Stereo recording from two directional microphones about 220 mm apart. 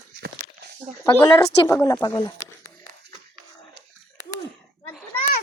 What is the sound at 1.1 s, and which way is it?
A woman's voice, 20° left (ahead or behind).